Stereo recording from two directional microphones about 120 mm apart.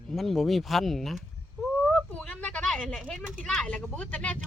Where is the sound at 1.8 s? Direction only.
5° left (ahead or behind).